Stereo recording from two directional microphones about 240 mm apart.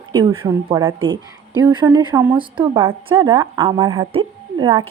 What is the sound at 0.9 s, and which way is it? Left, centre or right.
Speech, right.